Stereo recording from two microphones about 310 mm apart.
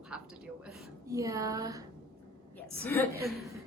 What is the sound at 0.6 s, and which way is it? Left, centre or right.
A woman's voice, centre.